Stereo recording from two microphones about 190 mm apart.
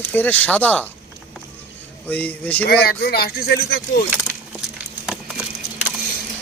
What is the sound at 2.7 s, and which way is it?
Speech, 55° left (ahead or behind).